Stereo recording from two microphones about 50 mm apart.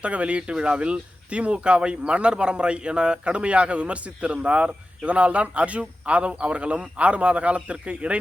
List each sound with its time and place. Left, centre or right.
0.0 s speech: right